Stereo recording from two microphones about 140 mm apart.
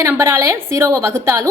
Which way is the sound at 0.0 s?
20° right (ahead or behind).